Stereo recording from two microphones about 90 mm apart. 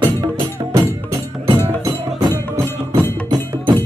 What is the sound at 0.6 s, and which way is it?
Music, 55° right (ahead or behind).